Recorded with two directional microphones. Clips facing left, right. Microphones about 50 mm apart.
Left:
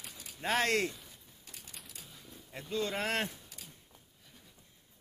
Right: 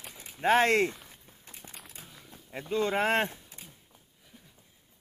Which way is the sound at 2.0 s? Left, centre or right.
Right.